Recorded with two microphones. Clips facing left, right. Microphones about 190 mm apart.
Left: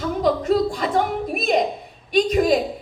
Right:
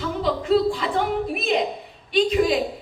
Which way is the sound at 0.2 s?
45° left (ahead or behind).